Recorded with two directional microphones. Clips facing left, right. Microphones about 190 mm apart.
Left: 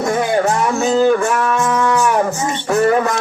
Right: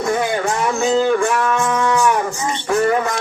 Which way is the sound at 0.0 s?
40° left (ahead or behind).